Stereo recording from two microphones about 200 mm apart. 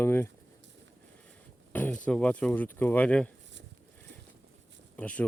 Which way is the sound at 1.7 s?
10° left (ahead or behind).